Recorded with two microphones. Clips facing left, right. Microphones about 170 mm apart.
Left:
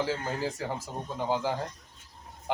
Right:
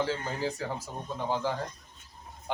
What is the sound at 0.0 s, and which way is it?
Speech, 10° left (ahead or behind).